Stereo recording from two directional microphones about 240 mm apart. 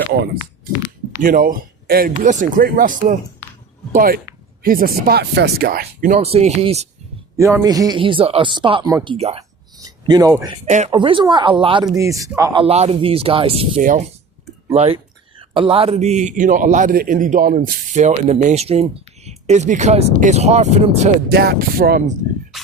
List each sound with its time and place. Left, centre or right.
1.2 s a man's voice: right
7.3 s speech: centre
9.1 s speech: right
9.7 s a sound: centre
10.7 s speech: right
12.6 s a man's voice: right